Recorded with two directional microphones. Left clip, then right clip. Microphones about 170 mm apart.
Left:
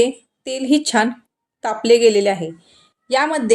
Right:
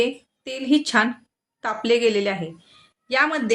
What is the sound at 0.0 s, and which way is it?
A woman's voice, 15° left (ahead or behind).